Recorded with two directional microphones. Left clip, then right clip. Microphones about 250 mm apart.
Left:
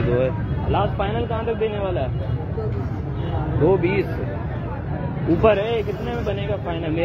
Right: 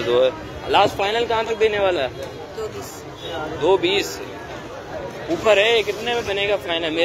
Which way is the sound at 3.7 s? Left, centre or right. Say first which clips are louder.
Right 3 dB; centre.